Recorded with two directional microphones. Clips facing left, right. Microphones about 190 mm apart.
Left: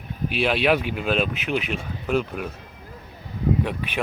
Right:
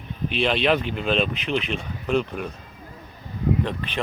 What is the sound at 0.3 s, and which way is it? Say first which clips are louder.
Speech: even; 5° left (ahead or behind).